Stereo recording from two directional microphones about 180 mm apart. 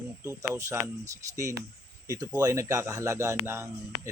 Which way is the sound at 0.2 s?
15° right (ahead or behind).